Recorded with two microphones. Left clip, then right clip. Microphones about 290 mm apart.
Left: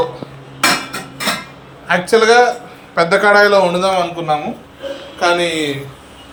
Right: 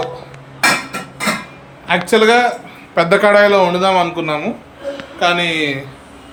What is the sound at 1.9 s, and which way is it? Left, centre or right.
Speech, centre.